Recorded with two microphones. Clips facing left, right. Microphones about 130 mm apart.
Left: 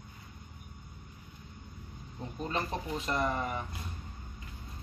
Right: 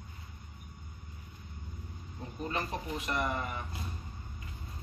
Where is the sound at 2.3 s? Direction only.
25° left (ahead or behind).